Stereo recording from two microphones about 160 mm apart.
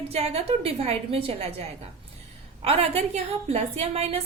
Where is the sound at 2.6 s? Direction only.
40° right (ahead or behind).